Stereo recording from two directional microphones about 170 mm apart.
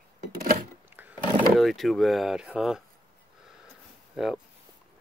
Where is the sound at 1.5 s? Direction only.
Centre (ahead or behind).